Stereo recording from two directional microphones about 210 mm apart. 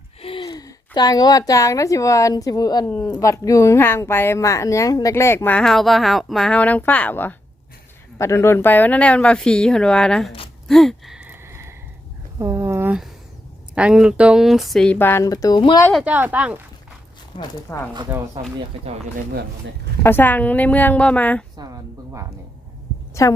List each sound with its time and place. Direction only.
0.2 s a woman's voice: 25° left (ahead or behind); by 10.3 s 5° left (ahead or behind)
10.7 s a sound: centre (ahead or behind)
13.7 s speech: 5° right (ahead or behind); by 15.9 s 20° left (ahead or behind)
15.9 s speech: 5° right (ahead or behind)
17.9 s speech: 15° right (ahead or behind)
20.0 s speech: 10° left (ahead or behind)
23.2 s speech: 15° left (ahead or behind)